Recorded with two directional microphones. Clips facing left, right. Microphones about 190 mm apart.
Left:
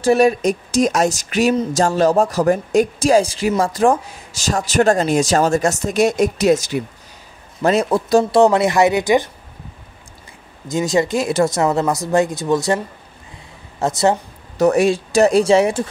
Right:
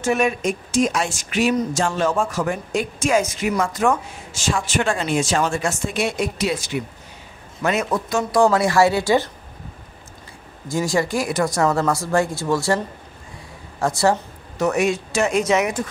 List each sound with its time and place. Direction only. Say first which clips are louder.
0.0 s speech: left 6 dB; 35° left (ahead or behind); by 9.3 s 15° left (ahead or behind)
10.7 s speech: left 3 dB; 20° left (ahead or behind)
14.6 s speech: left 5 dB; 35° left (ahead or behind)